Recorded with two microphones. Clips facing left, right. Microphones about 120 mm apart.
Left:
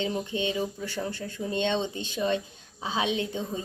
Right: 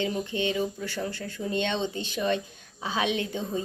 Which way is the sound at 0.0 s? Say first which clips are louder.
Right 1 dB; 20° left (ahead or behind).